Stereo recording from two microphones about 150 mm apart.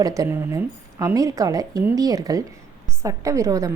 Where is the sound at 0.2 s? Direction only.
20° right (ahead or behind).